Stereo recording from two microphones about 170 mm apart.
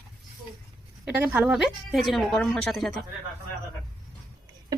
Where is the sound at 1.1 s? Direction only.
10° right (ahead or behind).